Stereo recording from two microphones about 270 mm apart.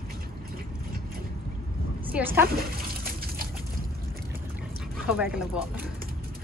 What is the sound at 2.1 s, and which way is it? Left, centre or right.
Speech, centre.